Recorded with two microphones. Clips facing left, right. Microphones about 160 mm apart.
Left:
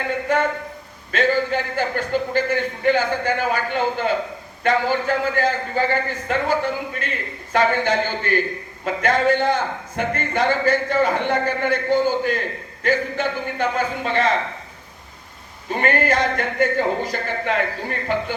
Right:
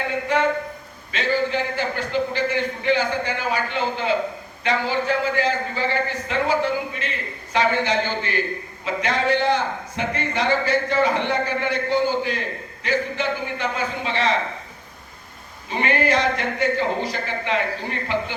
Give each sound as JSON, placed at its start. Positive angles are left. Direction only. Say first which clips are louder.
{"t": 0.3, "sound": "a sound", "louder": "left 1 dB", "side_deg": 50}
{"t": 1.1, "sound": "a man's voice", "louder": "left 3 dB", "side_deg": 50}
{"t": 15.7, "sound": "a man's voice", "louder": "left 1 dB", "side_deg": 50}